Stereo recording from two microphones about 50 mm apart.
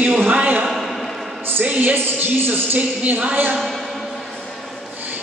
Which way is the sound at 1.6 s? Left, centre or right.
Right.